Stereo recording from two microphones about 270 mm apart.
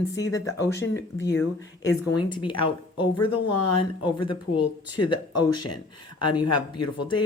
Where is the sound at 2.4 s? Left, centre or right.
Centre.